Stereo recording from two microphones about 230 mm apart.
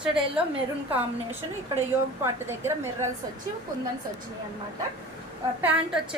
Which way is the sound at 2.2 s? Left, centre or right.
Centre.